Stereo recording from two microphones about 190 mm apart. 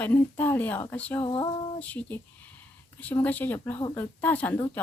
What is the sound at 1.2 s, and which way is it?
Female singing, 25° left (ahead or behind).